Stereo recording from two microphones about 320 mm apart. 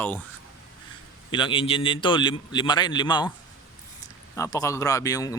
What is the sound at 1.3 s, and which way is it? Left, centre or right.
Speech, centre.